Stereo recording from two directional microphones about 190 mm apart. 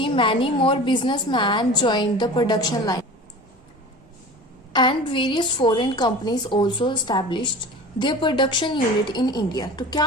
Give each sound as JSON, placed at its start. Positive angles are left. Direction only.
{"t": 0.0, "sound": "a woman's voice", "side_deg": 25}
{"t": 4.7, "sound": "a woman's voice", "side_deg": 25}